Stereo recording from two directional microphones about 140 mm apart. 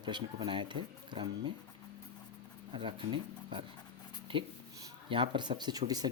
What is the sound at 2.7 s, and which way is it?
Speech, 40° right (ahead or behind).